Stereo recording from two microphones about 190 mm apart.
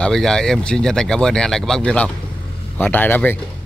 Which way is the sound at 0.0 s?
5° left (ahead or behind).